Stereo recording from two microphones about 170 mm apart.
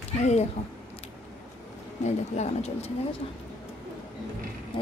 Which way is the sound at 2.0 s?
40° left (ahead or behind).